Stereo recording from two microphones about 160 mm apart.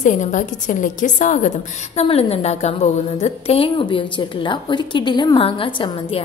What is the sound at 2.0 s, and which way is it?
A woman's voice, 40° left (ahead or behind).